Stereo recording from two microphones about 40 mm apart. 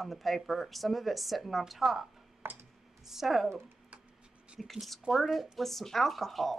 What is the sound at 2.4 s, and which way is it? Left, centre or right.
Computer keyboard, right.